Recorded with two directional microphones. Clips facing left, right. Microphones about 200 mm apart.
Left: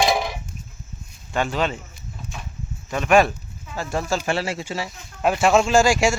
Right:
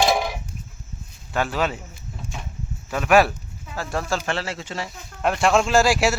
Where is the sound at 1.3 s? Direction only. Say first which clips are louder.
Left 1 dB; 5° right (ahead or behind).